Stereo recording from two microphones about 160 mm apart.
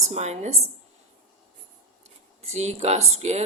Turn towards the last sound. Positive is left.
turn(degrees=-45)  # may be behind; listen again after turning